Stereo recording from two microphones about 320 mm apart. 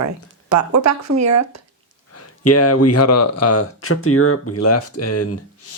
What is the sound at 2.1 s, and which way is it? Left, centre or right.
Speech, left.